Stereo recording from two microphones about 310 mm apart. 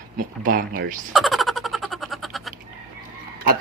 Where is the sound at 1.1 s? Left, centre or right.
Centre.